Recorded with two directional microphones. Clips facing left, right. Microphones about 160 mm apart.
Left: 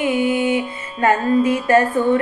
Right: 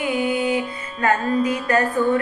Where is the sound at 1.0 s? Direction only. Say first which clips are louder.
Left 4 dB; 25° left (ahead or behind).